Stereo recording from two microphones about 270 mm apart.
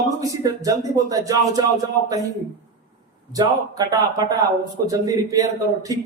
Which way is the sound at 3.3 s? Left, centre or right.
Centre.